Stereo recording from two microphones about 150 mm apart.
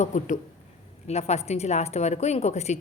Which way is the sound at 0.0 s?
55° left (ahead or behind).